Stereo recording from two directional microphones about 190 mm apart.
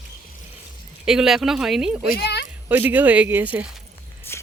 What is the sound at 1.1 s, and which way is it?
Speech, centre (ahead or behind).